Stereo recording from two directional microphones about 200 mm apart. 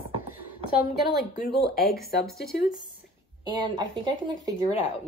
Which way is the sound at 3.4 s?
20° right (ahead or behind).